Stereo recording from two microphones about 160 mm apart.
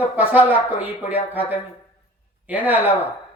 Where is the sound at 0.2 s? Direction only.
10° right (ahead or behind).